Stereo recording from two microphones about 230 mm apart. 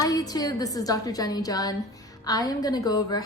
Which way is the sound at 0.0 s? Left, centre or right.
Centre.